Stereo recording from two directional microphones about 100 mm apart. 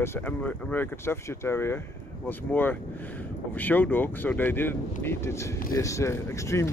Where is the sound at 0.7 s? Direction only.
20° left (ahead or behind).